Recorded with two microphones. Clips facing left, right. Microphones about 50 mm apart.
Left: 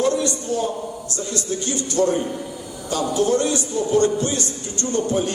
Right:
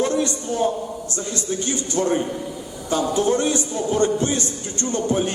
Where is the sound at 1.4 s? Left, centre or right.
Right.